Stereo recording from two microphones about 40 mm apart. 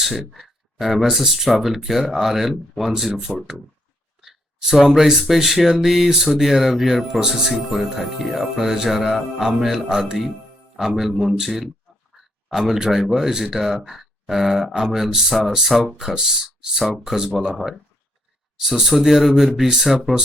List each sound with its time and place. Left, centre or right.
0.3 s speech: centre
1.6 s music: centre
4.2 s a sound: centre
5.0 s speech: centre
7.7 s music: centre
11.4 s speech: centre
15.6 s music: centre
17.1 s speech: centre
18.6 s speech: centre